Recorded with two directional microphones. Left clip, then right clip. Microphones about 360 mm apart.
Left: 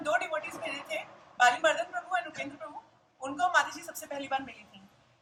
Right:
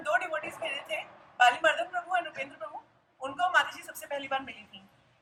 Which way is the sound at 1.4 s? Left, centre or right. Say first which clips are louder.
Right 1 dB; centre.